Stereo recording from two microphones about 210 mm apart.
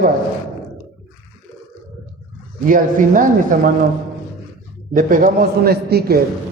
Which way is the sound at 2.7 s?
40° right (ahead or behind).